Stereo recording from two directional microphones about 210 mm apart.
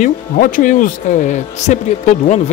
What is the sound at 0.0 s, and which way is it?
Speech, 40° left (ahead or behind).